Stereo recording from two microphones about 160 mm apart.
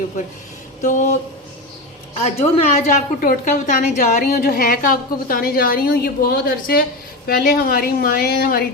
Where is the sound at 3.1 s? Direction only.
60° left (ahead or behind).